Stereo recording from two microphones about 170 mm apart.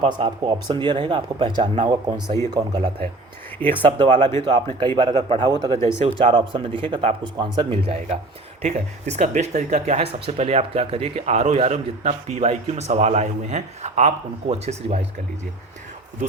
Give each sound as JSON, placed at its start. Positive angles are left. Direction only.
{"t": 0.2, "sound": "speech", "side_deg": -30}
{"t": 3.6, "sound": "speech", "side_deg": 10}
{"t": 3.9, "sound": "speech", "side_deg": -25}
{"t": 8.6, "sound": "speech", "side_deg": -40}